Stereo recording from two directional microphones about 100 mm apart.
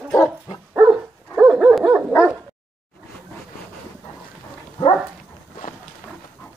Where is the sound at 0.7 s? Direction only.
15° right (ahead or behind).